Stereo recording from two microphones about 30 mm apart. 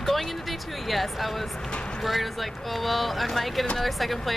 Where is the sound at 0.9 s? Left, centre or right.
Centre.